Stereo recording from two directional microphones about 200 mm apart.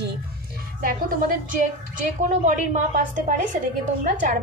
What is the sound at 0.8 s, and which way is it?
A woman's voice, 45° right (ahead or behind).